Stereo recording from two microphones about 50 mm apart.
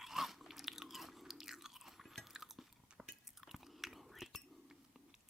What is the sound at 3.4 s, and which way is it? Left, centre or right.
Chewing, centre.